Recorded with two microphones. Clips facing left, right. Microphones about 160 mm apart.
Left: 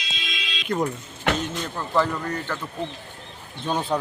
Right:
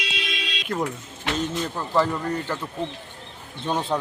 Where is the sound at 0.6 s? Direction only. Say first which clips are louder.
Left 3 dB; centre (ahead or behind).